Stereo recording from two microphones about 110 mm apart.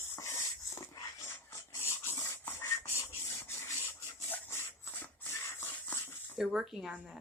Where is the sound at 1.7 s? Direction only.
25° left (ahead or behind).